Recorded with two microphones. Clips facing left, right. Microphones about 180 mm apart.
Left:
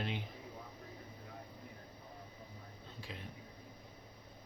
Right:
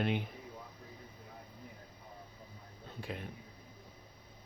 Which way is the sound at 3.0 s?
55° right (ahead or behind).